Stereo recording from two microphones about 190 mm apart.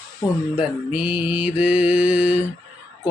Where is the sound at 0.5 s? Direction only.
5° right (ahead or behind).